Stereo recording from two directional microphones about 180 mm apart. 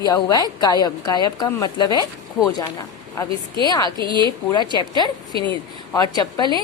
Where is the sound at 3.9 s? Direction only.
25° right (ahead or behind).